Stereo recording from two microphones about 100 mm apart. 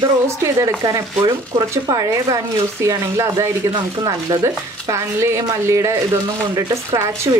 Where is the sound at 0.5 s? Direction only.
35° right (ahead or behind).